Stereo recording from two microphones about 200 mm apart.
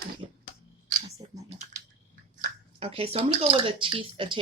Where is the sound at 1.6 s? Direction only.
40° right (ahead or behind).